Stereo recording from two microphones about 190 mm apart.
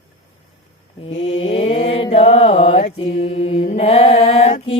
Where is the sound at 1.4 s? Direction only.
30° left (ahead or behind).